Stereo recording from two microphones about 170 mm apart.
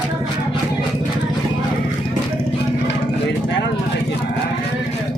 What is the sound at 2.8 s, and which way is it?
Vehicle, 90° left.